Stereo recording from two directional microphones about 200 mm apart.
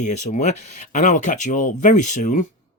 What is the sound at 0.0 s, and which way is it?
Speech, 35° left (ahead or behind).